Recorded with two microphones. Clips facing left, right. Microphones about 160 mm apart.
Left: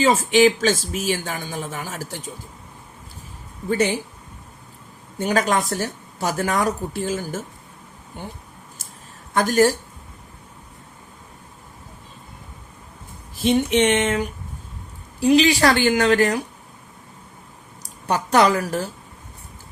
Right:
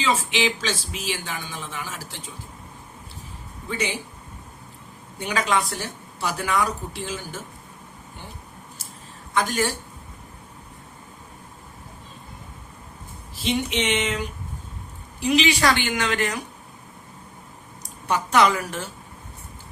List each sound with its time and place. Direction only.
0.0 s speech: 45° left (ahead or behind)
3.7 s speech: 50° left (ahead or behind)
5.2 s speech: 45° left (ahead or behind)
9.3 s speech: 45° left (ahead or behind)
13.3 s speech: 50° left (ahead or behind)
15.2 s a woman's voice: 35° left (ahead or behind)
18.1 s a woman's voice: 35° left (ahead or behind)